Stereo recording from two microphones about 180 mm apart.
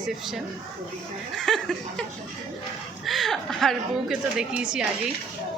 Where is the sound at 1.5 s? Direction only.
Centre (ahead or behind).